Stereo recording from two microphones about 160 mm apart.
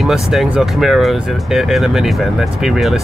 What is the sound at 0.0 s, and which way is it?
Speech, centre (ahead or behind).